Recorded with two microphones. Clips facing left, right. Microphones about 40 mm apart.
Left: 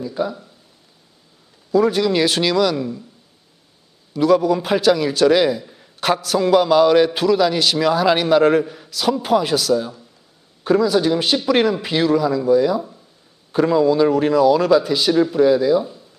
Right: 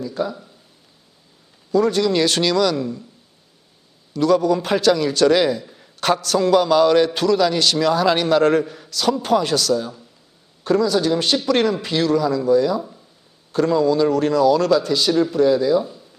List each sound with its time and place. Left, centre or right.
0.0 s speech: centre
1.7 s a man's voice: centre
4.1 s a man's voice: centre
12.8 s a sound: centre
13.5 s a man's voice: centre